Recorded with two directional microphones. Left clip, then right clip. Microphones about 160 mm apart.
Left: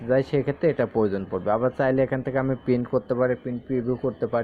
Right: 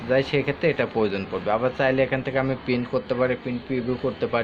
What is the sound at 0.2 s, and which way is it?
Speech, 40° left (ahead or behind).